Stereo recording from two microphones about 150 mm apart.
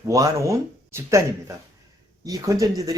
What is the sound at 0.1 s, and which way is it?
Speech, 20° right (ahead or behind).